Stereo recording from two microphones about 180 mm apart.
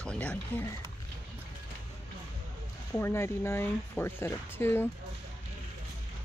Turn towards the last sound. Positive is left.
turn(degrees=10)  # may be behind; listen again after turning